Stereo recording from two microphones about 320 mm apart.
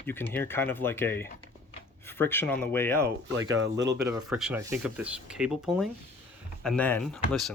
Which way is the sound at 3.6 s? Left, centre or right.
Right.